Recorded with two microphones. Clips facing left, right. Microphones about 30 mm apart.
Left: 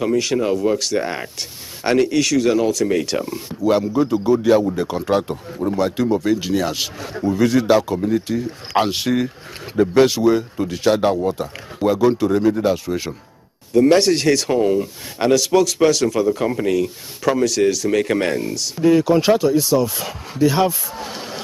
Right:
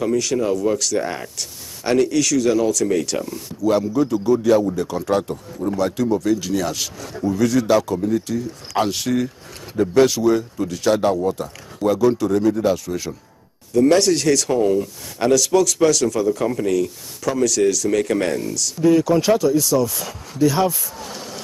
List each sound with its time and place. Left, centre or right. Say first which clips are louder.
0.0 s speech: left 1 dB; left